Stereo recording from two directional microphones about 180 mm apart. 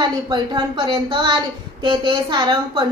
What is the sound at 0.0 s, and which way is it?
A woman's voice, 25° right (ahead or behind).